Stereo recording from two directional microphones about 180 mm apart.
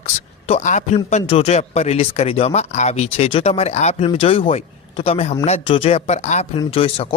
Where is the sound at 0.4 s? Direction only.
40° left (ahead or behind).